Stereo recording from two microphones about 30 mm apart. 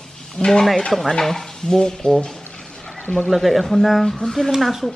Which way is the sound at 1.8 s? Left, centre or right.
Left.